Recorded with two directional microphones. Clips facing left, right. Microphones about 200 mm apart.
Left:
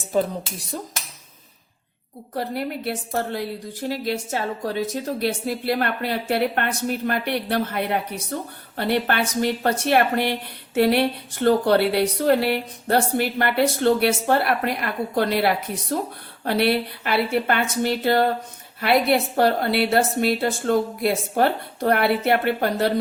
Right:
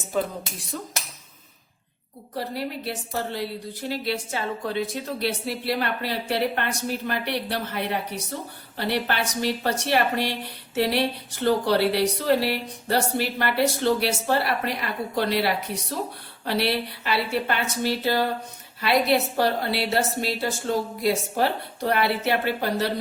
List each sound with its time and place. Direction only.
2.3 s a woman's voice: 55° left (ahead or behind)
19.4 s a woman's voice: 55° left (ahead or behind)